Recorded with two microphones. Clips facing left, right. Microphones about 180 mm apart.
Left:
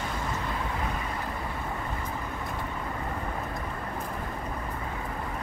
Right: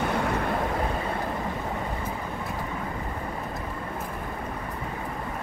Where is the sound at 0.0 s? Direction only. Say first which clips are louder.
Right 7 dB; 65° right (ahead or behind).